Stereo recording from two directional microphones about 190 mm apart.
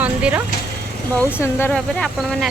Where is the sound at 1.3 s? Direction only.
10° left (ahead or behind).